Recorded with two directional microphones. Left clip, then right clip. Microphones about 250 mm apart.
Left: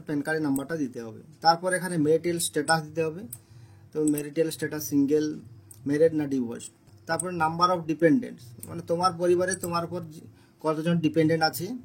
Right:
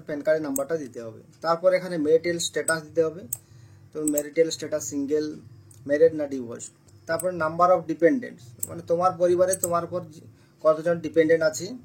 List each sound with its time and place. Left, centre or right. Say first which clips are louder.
0.0 s speech: right 4 dB; left